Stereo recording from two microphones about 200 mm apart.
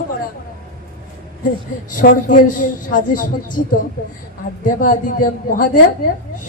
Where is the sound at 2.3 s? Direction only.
40° left (ahead or behind).